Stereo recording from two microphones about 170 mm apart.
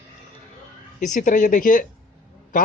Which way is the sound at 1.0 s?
50° left (ahead or behind).